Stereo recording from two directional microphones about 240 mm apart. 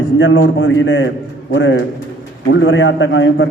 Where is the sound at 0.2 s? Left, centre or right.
Left.